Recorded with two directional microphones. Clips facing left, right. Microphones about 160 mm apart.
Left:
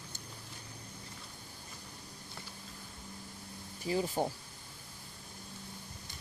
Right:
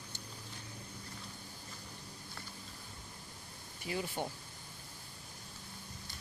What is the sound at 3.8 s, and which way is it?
Speech, 35° left (ahead or behind).